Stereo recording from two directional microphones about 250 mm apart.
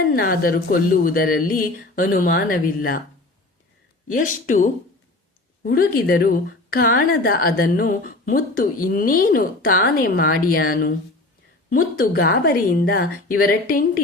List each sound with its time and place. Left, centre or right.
0.1 s a woman's voice: left
4.1 s a woman's voice: left